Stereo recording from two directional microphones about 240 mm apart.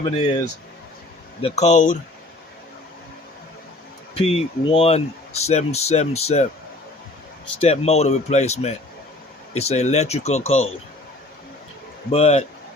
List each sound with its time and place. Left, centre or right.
0.0 s speech: centre
4.1 s speech: left
7.6 s speech: left
12.1 s speech: left